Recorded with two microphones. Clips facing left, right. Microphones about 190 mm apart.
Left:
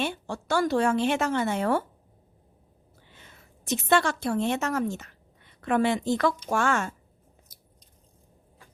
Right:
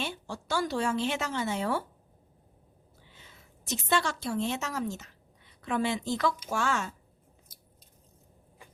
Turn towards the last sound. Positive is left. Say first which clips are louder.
# left 5 dB
turn(degrees=55)  # may be behind; listen again after turning